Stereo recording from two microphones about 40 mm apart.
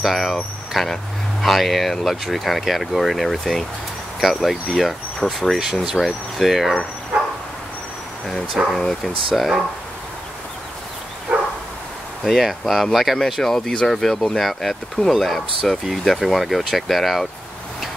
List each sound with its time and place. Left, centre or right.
0.0 s speech: centre
5.6 s speech: centre
5.9 s speech: centre
8.7 s speech: centre
11.3 s bow-wow: right
12.3 s speech: centre
13.2 s speech: centre
15.2 s speech: centre
15.7 s speech: centre
16.1 s speech: centre